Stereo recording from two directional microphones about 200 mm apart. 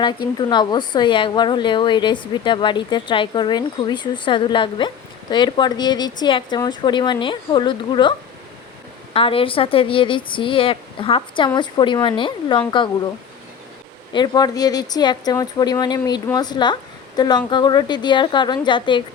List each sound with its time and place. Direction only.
0.3 s a woman's voice: 20° left (ahead or behind)
9.1 s a woman's voice: 25° left (ahead or behind)
14.1 s a woman's voice: 20° left (ahead or behind)